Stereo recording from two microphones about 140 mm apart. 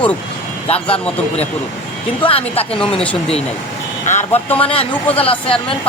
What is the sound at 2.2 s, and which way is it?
Speech, 40° left (ahead or behind).